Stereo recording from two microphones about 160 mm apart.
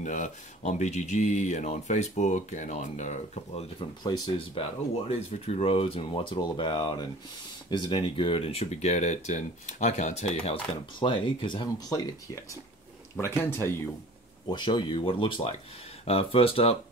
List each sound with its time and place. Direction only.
0.0 s speech: 50° left (ahead or behind)
4.0 s speech: 30° left (ahead or behind)
13.1 s speech: 15° left (ahead or behind)
14.5 s speech: 30° left (ahead or behind)